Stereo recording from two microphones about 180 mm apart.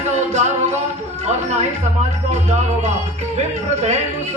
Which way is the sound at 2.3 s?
40° right (ahead or behind).